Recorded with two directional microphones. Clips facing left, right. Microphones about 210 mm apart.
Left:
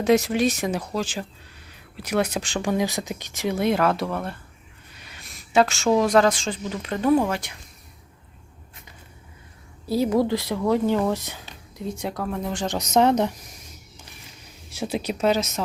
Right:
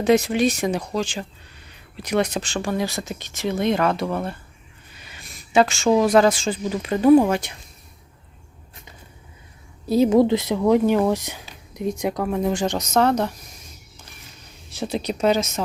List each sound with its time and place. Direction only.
0.0 s a woman's voice: centre (ahead or behind); by 7.5 s 20° right (ahead or behind)
9.9 s speech: 20° right (ahead or behind)
12.6 s speech: 10° left (ahead or behind)
12.9 s speech: 20° left (ahead or behind)
14.7 s speech: 10° left (ahead or behind)